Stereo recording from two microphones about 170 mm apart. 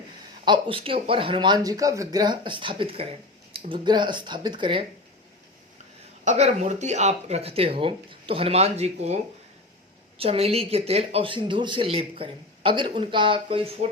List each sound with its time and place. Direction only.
0.4 s speech: 30° right (ahead or behind)
6.2 s speech: 40° right (ahead or behind)